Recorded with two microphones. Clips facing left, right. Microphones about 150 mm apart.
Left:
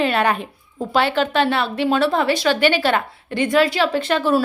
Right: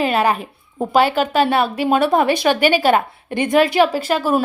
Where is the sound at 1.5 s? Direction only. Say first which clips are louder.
Right 3 dB; 50° right (ahead or behind).